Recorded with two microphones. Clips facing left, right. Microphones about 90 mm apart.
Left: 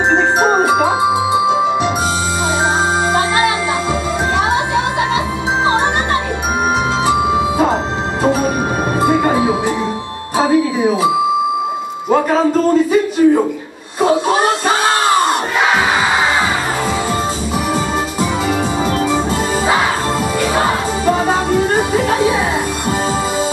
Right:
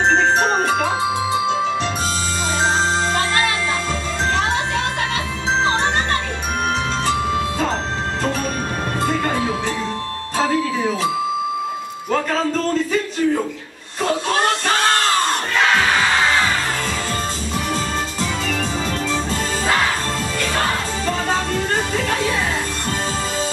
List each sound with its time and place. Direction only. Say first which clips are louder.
0.1 s music: left 4 dB; 15° left (ahead or behind)
3.2 s music: left 5 dB; 15° left (ahead or behind)
7.1 s music: left 6 dB; 15° left (ahead or behind)
12.1 s speech: left 7 dB; 15° left (ahead or behind)
14.0 s crowd: left 6 dB; 15° left (ahead or behind)
18.9 s music: left 7 dB; 15° left (ahead or behind)
20.3 s music: left 5 dB; 15° left (ahead or behind)